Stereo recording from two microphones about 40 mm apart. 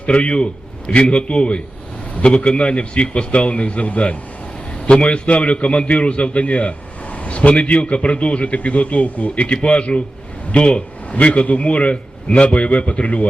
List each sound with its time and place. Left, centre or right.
0.0 s a man's voice: left